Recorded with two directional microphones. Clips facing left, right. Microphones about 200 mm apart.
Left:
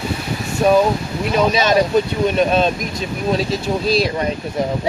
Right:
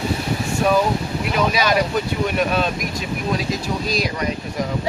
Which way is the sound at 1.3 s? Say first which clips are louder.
Left 4 dB; 25° left (ahead or behind).